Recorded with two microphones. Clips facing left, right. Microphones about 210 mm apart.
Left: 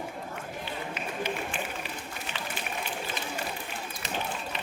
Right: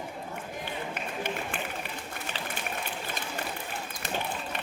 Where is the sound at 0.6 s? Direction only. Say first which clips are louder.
Even; 55° right (ahead or behind).